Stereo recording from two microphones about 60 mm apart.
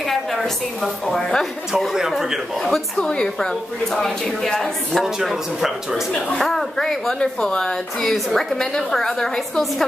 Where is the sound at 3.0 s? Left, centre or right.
Centre.